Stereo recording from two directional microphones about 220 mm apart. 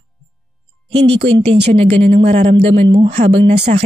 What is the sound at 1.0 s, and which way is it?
Speech, 25° right (ahead or behind).